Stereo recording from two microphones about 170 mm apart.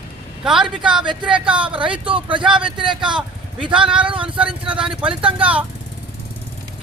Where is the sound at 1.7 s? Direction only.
30° right (ahead or behind).